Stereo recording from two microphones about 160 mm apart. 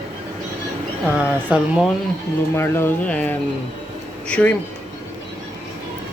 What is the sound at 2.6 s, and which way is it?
Speech, 15° left (ahead or behind).